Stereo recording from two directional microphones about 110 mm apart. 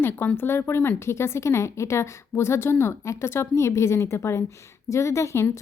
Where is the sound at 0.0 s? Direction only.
20° left (ahead or behind).